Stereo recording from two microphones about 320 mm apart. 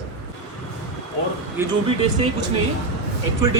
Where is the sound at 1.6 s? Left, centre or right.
Centre.